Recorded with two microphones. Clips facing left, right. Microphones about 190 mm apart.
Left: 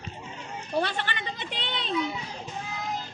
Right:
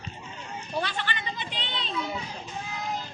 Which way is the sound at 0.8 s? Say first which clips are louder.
Left 2 dB; 55° left (ahead or behind).